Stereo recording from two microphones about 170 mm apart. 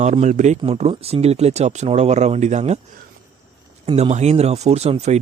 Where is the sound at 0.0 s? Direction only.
45° right (ahead or behind).